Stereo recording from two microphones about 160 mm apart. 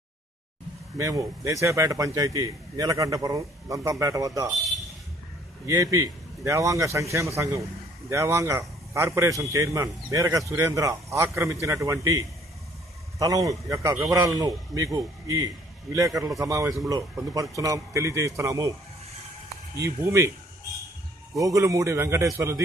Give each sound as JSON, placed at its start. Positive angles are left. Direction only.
{"t": 0.9, "sound": "a man's voice", "side_deg": -20}
{"t": 5.7, "sound": "a man's voice", "side_deg": -20}
{"t": 19.8, "sound": "speech", "side_deg": -20}
{"t": 21.4, "sound": "a man's voice", "side_deg": -20}